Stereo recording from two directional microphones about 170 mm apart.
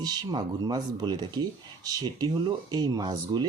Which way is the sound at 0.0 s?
25° right (ahead or behind).